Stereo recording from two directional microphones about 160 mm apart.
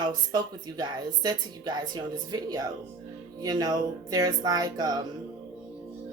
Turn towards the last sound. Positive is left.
turn(degrees=-25)  # may be behind; listen again after turning